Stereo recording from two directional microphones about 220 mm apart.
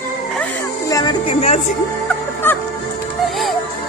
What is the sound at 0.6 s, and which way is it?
Music, 15° left (ahead or behind).